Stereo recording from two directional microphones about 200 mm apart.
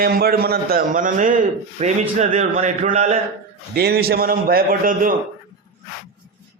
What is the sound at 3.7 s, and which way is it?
A man's voice, 50° right (ahead or behind).